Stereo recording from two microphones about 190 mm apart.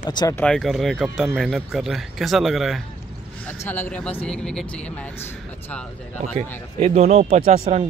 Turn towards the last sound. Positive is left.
turn(degrees=-35)  # may be behind; listen again after turning